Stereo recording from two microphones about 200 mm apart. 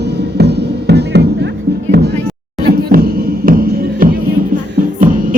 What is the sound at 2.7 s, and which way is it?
Music, 50° right (ahead or behind).